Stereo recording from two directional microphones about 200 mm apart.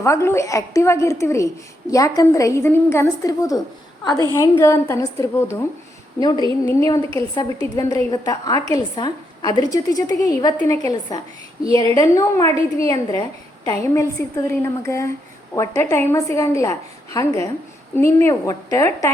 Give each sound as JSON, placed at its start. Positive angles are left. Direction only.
{"t": 0.0, "sound": "a woman's voice", "side_deg": 15}
{"t": 6.7, "sound": "a woman's voice", "side_deg": 15}